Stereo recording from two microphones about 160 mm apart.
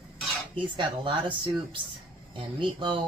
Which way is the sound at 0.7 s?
30° right (ahead or behind).